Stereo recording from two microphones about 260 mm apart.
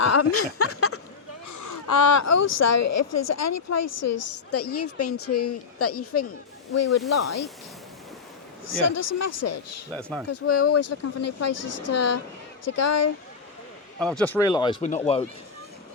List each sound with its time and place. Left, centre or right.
0.0 s speech: left
2.0 s speech: left
8.6 s speech: left
9.9 s speech: centre
10.2 s speech: left
14.0 s speech: centre; by 15.2 s left